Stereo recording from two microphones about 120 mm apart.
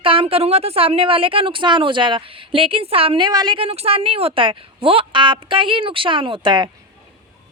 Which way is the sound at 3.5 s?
55° right (ahead or behind).